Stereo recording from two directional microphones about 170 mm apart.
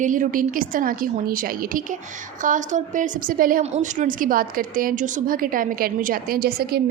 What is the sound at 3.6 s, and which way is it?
A woman's voice, 45° right (ahead or behind).